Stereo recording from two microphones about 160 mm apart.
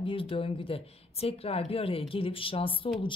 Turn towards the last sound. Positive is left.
turn(degrees=35)  # may be behind; listen again after turning